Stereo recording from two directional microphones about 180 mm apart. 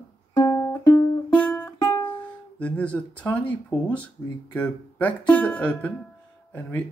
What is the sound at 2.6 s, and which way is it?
Speech, 5° left (ahead or behind).